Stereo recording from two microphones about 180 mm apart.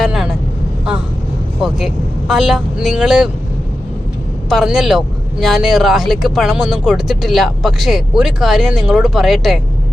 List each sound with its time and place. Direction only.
0.0 s vehicle: 5° right (ahead or behind)
1.6 s speech: centre (ahead or behind)
4.4 s speech: centre (ahead or behind)